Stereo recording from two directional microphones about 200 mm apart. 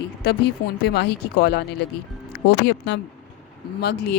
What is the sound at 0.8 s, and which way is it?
Speech, 55° left (ahead or behind).